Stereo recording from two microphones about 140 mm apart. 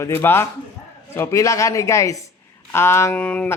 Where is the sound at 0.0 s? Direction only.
15° left (ahead or behind).